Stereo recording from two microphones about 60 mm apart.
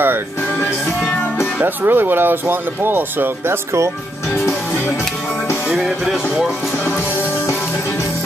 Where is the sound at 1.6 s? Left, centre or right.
Right.